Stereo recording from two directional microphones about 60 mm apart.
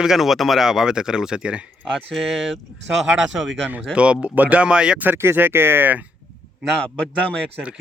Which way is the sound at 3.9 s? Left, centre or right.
Centre.